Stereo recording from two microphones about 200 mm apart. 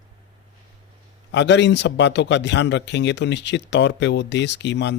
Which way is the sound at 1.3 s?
60° left (ahead or behind).